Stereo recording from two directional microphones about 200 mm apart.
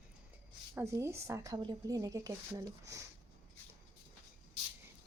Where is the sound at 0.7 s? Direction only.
15° right (ahead or behind).